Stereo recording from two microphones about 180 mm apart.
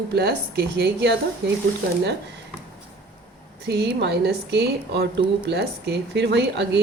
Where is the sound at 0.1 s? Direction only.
60° right (ahead or behind).